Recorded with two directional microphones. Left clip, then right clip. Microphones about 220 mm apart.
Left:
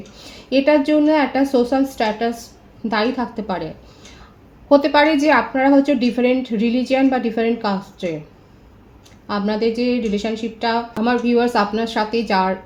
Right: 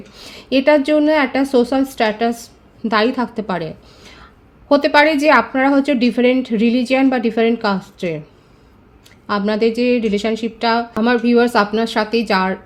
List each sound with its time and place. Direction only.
0.2 s a woman's voice: 45° right (ahead or behind)
4.7 s a woman's voice: 50° right (ahead or behind)
9.2 s a woman's voice: 50° right (ahead or behind)